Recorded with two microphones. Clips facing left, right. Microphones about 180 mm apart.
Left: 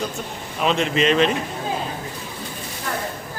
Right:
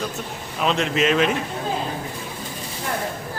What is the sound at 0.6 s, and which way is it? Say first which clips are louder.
Speech: left 1 dB; centre (ahead or behind).